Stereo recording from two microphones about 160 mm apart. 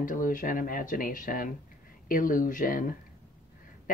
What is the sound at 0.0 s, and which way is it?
Speech, 55° left (ahead or behind).